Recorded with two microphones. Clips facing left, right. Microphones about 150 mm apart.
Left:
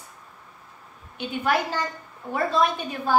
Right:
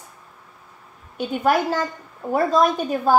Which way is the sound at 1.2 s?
45° right (ahead or behind).